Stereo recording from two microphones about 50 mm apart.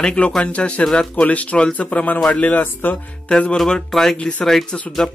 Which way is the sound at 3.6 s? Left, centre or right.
Centre.